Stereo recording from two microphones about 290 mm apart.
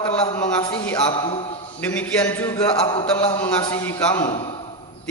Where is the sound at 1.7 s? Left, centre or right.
Centre.